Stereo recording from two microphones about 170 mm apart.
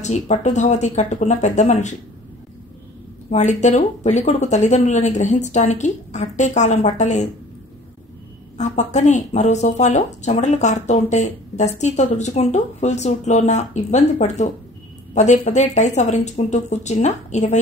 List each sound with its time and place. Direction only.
0.0 s speech: 40° left (ahead or behind)
3.3 s speech: 45° left (ahead or behind)
8.5 s speech: 45° left (ahead or behind)